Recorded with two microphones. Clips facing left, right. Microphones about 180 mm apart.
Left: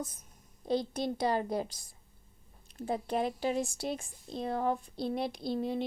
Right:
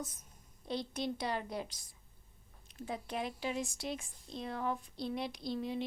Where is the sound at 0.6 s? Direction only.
40° left (ahead or behind).